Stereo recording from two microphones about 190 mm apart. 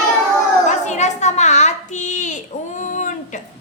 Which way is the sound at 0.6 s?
40° left (ahead or behind).